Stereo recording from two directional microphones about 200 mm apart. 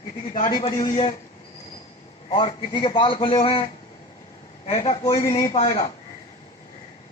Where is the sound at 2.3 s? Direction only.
25° left (ahead or behind).